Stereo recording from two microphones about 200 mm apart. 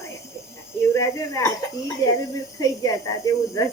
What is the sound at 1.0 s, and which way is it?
Speech, 15° left (ahead or behind).